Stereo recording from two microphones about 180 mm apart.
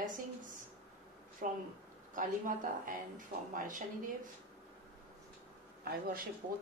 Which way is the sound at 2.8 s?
50° right (ahead or behind).